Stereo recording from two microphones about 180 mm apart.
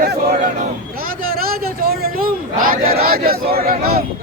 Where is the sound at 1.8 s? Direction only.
55° right (ahead or behind).